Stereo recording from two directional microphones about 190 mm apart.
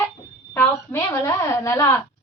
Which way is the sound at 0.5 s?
10° left (ahead or behind).